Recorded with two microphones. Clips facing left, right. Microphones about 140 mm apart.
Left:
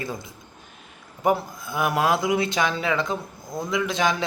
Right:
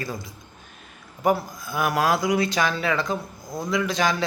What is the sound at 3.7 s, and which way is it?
Speech, 20° left (ahead or behind).